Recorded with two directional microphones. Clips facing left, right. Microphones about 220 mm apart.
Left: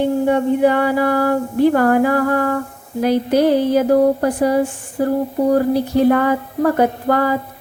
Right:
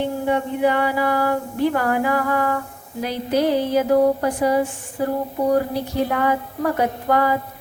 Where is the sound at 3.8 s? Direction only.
50° left (ahead or behind).